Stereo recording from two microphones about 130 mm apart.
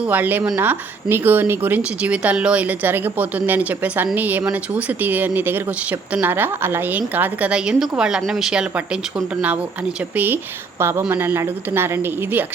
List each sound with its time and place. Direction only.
0.0 s a woman's voice: 15° right (ahead or behind)